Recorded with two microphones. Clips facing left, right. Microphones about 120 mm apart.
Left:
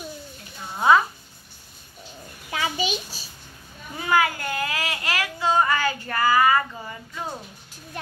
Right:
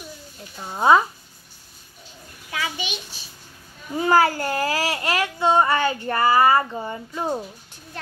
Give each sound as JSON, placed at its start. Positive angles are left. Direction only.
{"t": 0.7, "sound": "speech", "side_deg": -25}
{"t": 2.5, "sound": "a child's voice", "side_deg": 30}
{"t": 3.9, "sound": "speech", "side_deg": -35}